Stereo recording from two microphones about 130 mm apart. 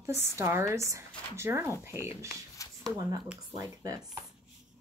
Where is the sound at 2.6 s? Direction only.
25° left (ahead or behind).